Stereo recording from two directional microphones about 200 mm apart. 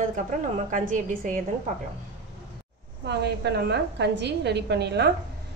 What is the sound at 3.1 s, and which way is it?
A woman's voice, 55° right (ahead or behind).